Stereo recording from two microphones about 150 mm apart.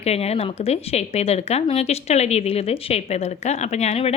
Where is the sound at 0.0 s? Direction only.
45° left (ahead or behind).